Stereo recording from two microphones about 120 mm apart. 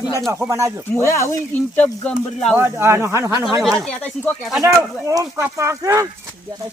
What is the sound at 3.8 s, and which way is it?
Speech, 10° left (ahead or behind).